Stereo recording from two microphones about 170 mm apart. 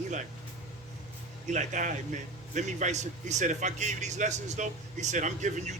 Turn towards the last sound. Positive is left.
turn(degrees=-45)  # may be behind; listen again after turning